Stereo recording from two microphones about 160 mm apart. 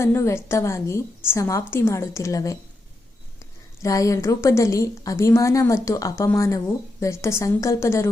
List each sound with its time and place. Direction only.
0.0 s a woman's voice: 15° left (ahead or behind)
3.8 s a woman's voice: 20° left (ahead or behind)